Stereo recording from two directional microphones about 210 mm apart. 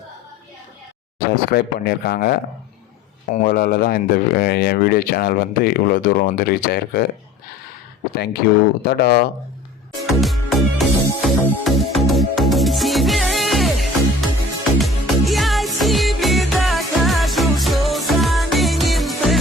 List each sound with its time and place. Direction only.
1.5 s speech: 45° left (ahead or behind)
8.1 s speech: 50° left (ahead or behind)
10.2 s music: centre (ahead or behind)